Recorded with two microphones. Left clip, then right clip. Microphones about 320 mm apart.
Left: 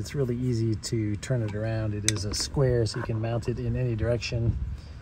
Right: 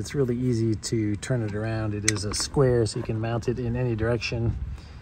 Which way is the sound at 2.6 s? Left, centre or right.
Right.